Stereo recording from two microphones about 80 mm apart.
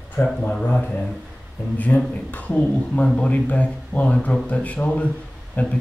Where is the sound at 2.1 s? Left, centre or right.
Centre.